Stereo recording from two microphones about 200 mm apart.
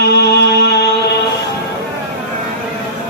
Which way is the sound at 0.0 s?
55° left (ahead or behind).